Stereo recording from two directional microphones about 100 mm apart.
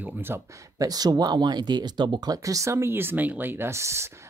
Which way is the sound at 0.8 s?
40° right (ahead or behind).